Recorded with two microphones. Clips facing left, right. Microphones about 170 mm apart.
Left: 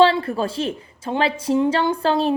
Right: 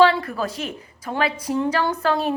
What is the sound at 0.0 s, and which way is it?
A woman's voice, 30° left (ahead or behind).